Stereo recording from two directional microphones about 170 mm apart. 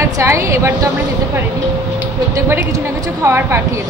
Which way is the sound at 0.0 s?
15° right (ahead or behind).